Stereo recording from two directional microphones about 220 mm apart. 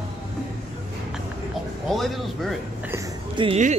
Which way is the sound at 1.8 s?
Centre (ahead or behind).